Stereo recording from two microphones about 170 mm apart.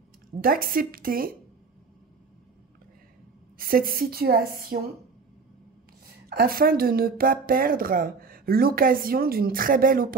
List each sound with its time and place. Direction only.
0.4 s speech: 60° right (ahead or behind)
3.5 s speech: 55° right (ahead or behind)
6.2 s speech: 60° right (ahead or behind)